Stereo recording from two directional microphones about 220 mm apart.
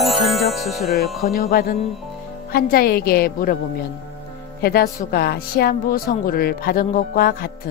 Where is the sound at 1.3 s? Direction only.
45° left (ahead or behind).